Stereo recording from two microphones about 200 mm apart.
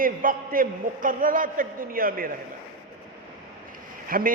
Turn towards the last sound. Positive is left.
turn(degrees=-45)  # may be behind; listen again after turning